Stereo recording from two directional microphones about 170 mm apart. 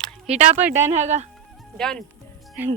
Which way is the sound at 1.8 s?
5° left (ahead or behind).